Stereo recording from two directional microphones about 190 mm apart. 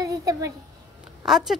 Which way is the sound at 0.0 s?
15° right (ahead or behind).